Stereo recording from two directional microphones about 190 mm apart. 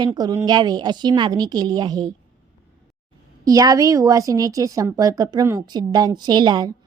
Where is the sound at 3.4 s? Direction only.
20° right (ahead or behind).